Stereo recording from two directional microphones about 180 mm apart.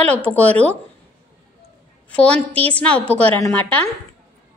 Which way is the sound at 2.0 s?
5° left (ahead or behind).